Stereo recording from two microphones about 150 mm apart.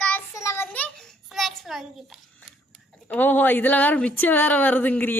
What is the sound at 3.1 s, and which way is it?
Speech, 10° left (ahead or behind).